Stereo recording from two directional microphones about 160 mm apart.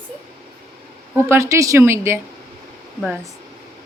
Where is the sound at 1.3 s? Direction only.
20° right (ahead or behind).